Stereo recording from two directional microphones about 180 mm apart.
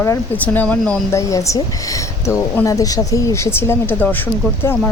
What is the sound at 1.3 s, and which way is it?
Speech, 20° left (ahead or behind).